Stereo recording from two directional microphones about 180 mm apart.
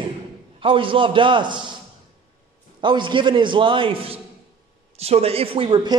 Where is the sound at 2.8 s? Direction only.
25° right (ahead or behind).